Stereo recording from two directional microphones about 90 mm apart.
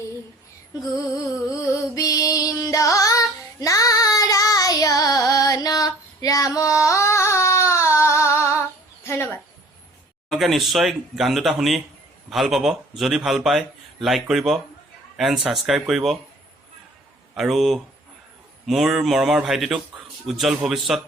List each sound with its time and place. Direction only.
2.0 s music: 40° left (ahead or behind)
9.0 s a sound: 30° left (ahead or behind)
10.2 s a man's voice: centre (ahead or behind)
17.3 s a man's voice: centre (ahead or behind)